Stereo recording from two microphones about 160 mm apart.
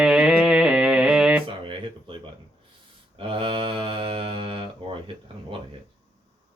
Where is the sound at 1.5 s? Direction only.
30° right (ahead or behind).